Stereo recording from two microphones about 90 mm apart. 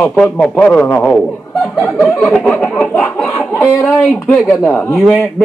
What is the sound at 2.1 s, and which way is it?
Speech, 5° left (ahead or behind).